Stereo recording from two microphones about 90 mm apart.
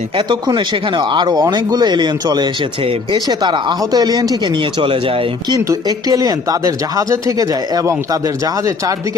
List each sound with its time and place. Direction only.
0.3 s speech: 55° right (ahead or behind)
4.8 s speech: 90° right
5.5 s speech: 40° right (ahead or behind)